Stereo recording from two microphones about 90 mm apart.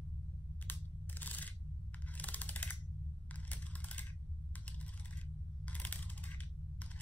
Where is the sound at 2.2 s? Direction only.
15° left (ahead or behind).